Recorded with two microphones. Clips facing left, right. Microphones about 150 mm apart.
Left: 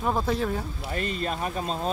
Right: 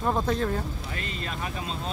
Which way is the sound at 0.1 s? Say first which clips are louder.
Even; 5° left (ahead or behind).